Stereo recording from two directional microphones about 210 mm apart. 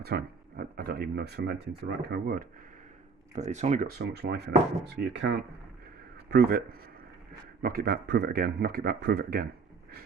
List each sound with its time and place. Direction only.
0.0 s speech: 45° right (ahead or behind)
3.3 s speech: 35° right (ahead or behind); by 6.6 s 50° right (ahead or behind)
7.6 s speech: 45° right (ahead or behind)